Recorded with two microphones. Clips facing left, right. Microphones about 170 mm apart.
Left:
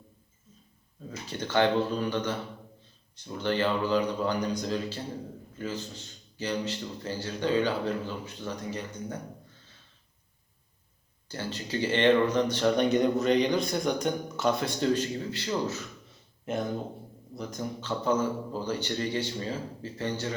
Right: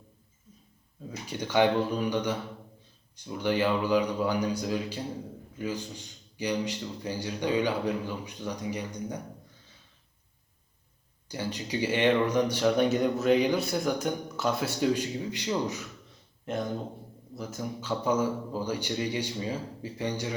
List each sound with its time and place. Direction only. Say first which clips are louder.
1.3 s speech: right 1 dB; 10° right (ahead or behind)
11.3 s speech: right 1 dB; 15° right (ahead or behind)
16.5 s speech: left 1 dB; 5° left (ahead or behind); by 20.3 s 15° right (ahead or behind)